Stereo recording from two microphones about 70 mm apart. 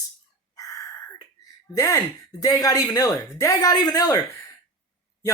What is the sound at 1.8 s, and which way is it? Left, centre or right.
Speech, left.